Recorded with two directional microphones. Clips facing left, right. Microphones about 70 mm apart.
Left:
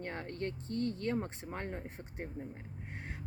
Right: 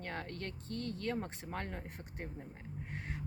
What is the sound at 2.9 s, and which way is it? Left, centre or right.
Vehicle, left.